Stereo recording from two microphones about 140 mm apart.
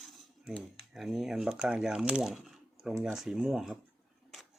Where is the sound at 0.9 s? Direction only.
5° right (ahead or behind).